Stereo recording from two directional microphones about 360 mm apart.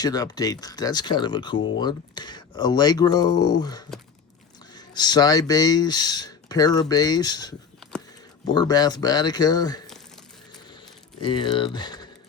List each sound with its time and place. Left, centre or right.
0.0 s speech: centre
8.5 s speech: centre
11.2 s speech: centre